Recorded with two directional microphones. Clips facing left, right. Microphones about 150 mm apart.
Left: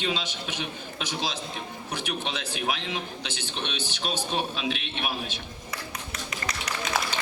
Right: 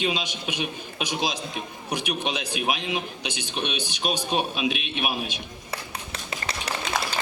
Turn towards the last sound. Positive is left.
turn(degrees=-30)  # may be behind; listen again after turning